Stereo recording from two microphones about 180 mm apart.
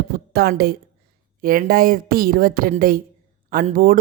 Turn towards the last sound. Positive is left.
turn(degrees=-50)  # may be behind; listen again after turning